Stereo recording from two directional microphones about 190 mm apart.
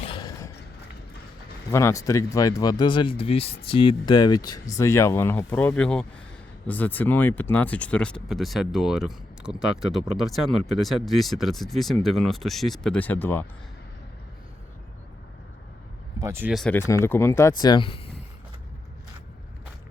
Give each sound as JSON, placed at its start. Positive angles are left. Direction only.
{"t": 0.0, "sound": "a sound", "side_deg": 25}
{"t": 1.7, "sound": "speech", "side_deg": 15}
{"t": 16.1, "sound": "speech", "side_deg": -15}
{"t": 16.5, "sound": "speech", "side_deg": 0}
{"t": 16.7, "sound": "speech", "side_deg": 15}